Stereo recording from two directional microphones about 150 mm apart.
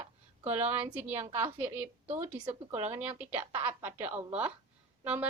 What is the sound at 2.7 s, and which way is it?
Speech, 45° right (ahead or behind).